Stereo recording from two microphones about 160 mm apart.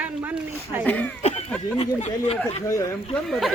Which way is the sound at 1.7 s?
40° left (ahead or behind).